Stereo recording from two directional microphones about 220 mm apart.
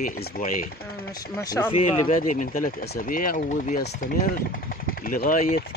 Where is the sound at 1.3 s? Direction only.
10° left (ahead or behind).